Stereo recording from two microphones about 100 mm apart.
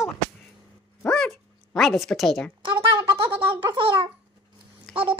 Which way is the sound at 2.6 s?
60° right (ahead or behind).